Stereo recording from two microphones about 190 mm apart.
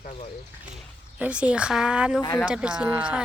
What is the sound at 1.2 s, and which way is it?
Speech, 5° right (ahead or behind).